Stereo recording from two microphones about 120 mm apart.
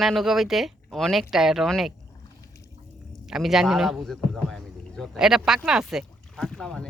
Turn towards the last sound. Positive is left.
turn(degrees=5)  # may be behind; listen again after turning